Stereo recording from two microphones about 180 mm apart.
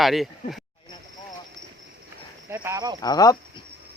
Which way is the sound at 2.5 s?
15° right (ahead or behind).